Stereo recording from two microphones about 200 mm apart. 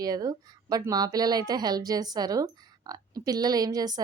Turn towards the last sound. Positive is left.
turn(degrees=-20)  # may be behind; listen again after turning